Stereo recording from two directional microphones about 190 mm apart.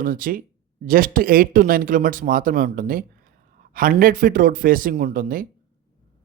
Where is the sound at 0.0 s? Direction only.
45° right (ahead or behind).